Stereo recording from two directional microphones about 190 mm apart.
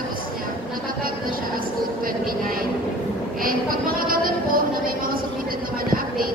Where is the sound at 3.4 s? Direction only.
50° right (ahead or behind).